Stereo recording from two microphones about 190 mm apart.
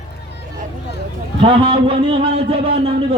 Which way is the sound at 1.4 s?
30° right (ahead or behind).